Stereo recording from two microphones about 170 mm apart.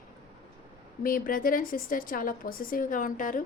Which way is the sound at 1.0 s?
55° left (ahead or behind).